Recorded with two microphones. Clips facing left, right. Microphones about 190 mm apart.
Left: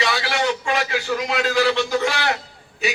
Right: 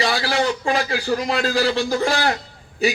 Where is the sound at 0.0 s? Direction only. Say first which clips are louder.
Right 2 dB; 35° right (ahead or behind).